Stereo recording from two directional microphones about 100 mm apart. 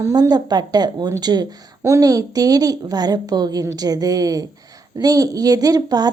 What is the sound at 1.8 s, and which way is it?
A woman's voice, 35° right (ahead or behind).